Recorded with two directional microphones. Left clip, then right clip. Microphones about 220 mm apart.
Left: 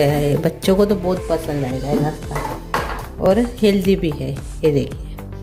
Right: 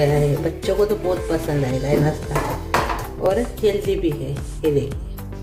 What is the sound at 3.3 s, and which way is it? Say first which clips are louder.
Speech: left 4 dB; 45° left (ahead or behind).